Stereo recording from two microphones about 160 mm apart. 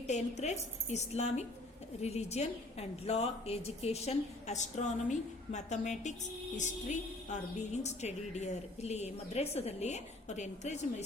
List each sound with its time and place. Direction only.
0.1 s a woman's voice: 45° left (ahead or behind)